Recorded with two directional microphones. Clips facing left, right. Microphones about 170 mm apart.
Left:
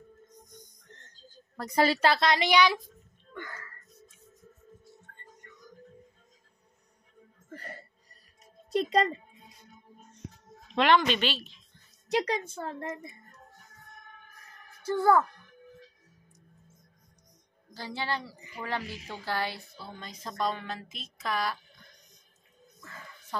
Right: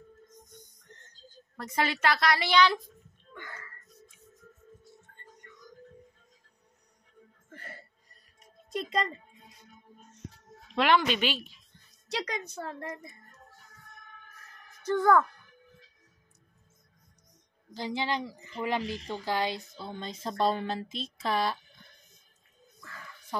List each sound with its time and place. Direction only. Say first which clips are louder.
1.6 s a woman's voice: left 4 dB; 35° left (ahead or behind); by 2.8 s 10° left (ahead or behind)
8.6 s a child's voice: left 6 dB; 40° left (ahead or behind)
10.8 s a woman's voice: left 1 dB; 10° right (ahead or behind)
12.2 s a woman's voice: left 5 dB; 30° left (ahead or behind)
14.8 s a child's voice: even; 10° left (ahead or behind)
17.7 s a woman's voice: right 3 dB; 15° right (ahead or behind)
22.8 s a sound: even; 20° left (ahead or behind)